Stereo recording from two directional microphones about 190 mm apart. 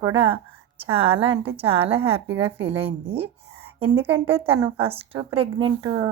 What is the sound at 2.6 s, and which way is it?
A woman's voice, 30° right (ahead or behind).